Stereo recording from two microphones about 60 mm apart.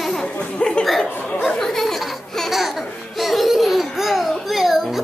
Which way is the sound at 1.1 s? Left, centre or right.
Left.